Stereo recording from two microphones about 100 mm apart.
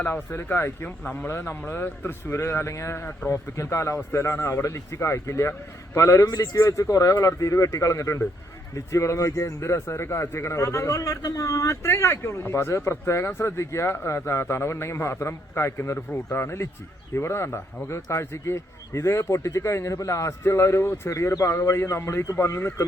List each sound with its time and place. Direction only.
0.0 s speech: 25° left (ahead or behind)